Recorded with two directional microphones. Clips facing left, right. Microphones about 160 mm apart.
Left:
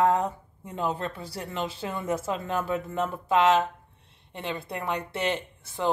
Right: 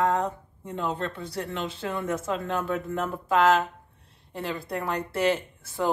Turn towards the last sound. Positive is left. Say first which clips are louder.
# right 1 dB
turn(degrees=-5)  # may be behind; listen again after turning